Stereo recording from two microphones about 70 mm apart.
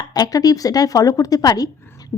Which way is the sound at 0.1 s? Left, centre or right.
Left.